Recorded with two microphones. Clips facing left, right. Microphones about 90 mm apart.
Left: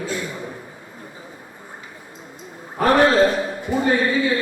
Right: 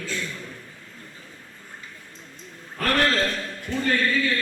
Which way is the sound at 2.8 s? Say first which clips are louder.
Left 8 dB; 20° left (ahead or behind).